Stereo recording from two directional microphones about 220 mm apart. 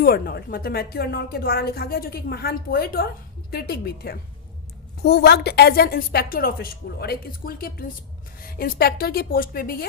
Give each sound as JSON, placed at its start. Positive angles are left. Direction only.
{"t": 0.0, "sound": "a woman's voice", "side_deg": 45}